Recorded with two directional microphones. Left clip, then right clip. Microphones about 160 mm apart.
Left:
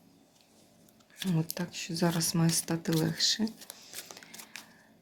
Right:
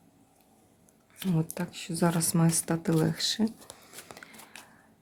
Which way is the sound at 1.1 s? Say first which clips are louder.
Right 2 dB; 15° right (ahead or behind).